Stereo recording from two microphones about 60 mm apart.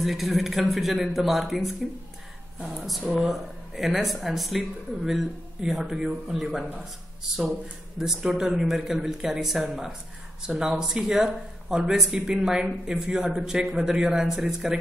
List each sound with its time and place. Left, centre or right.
0.0 s speech: centre
8.0 s a man's voice: centre